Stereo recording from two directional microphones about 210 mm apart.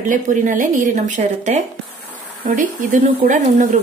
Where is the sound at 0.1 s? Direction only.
40° right (ahead or behind).